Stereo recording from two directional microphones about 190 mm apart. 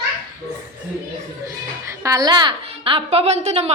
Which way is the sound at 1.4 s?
15° right (ahead or behind).